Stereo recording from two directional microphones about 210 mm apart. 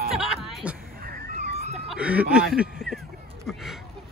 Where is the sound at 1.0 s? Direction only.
45° right (ahead or behind).